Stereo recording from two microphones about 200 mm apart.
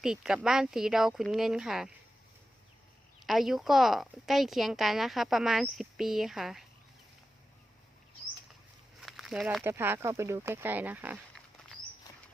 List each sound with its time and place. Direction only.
0.0 s a woman's voice: centre (ahead or behind)
3.2 s a woman's voice: centre (ahead or behind)
9.0 s walk: centre (ahead or behind)
9.6 s speech: 10° right (ahead or behind)
12.1 s a sound: 20° left (ahead or behind)